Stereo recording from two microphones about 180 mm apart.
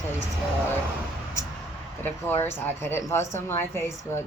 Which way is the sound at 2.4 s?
10° left (ahead or behind).